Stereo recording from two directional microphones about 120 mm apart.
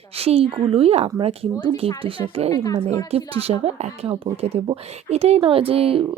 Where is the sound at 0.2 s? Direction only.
55° right (ahead or behind).